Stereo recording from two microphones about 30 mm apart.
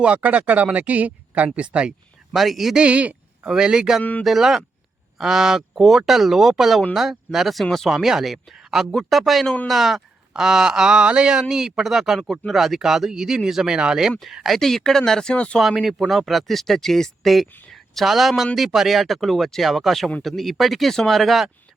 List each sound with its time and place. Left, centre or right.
0.0 s speech: right
1.5 s speech: right
2.3 s speech: centre
2.9 s speech: right
3.5 s speech: right
4.4 s speech: centre
7.6 s speech: centre
7.9 s speech: centre
9.0 s speech: centre
10.3 s speech: centre
14.5 s speech: centre; by 15.4 s left
15.6 s speech: centre